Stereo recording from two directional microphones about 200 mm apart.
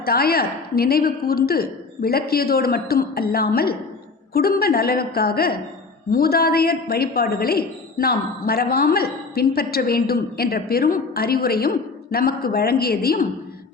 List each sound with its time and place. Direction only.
0.0 s a woman's voice: 50° left (ahead or behind)